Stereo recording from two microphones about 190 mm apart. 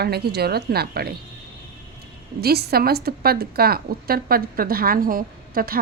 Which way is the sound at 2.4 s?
55° right (ahead or behind).